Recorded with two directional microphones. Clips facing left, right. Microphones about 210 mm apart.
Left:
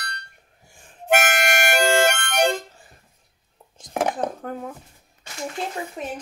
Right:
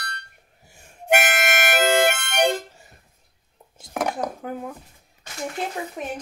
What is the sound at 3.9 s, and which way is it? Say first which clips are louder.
Dishes: left 2 dB; 30° left (ahead or behind).